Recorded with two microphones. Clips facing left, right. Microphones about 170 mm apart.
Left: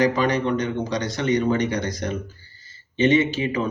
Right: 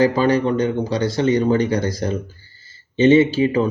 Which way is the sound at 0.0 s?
30° right (ahead or behind).